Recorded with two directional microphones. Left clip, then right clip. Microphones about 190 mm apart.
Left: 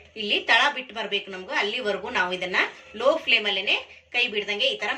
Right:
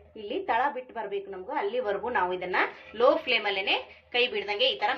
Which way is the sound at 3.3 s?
50° right (ahead or behind).